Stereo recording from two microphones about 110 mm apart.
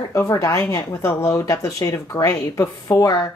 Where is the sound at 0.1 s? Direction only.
30° left (ahead or behind).